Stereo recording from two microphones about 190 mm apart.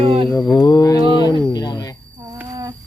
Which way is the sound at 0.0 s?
30° right (ahead or behind).